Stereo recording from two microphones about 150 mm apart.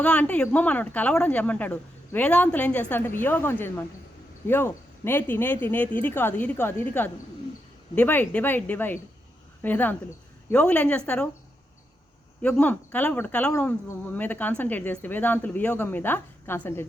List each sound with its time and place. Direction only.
0.0 s speech: 10° left (ahead or behind)
12.4 s speech: 10° left (ahead or behind)